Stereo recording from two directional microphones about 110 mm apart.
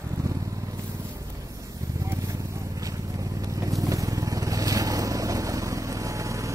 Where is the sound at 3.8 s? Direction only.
30° right (ahead or behind).